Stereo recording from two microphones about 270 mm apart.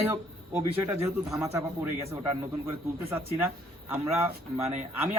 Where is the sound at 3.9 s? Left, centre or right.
Centre.